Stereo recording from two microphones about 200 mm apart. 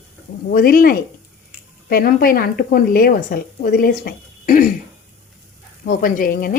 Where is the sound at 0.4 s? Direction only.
45° left (ahead or behind).